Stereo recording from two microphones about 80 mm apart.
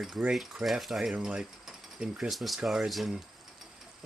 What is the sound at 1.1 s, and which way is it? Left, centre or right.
Speech, centre.